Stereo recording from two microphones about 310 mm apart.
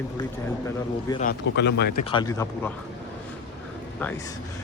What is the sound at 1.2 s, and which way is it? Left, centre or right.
Speech, left.